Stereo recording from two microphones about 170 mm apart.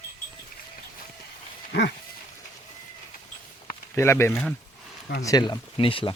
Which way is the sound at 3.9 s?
15° left (ahead or behind).